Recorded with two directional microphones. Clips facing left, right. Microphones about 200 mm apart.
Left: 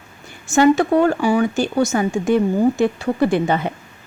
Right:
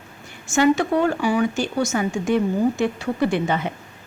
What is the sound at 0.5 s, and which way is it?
A woman's voice, 35° left (ahead or behind).